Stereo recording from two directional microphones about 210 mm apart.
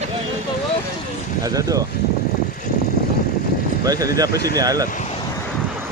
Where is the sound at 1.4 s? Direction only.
15° right (ahead or behind).